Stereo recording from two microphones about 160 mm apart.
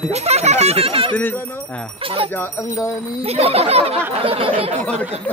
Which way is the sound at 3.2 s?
40° right (ahead or behind).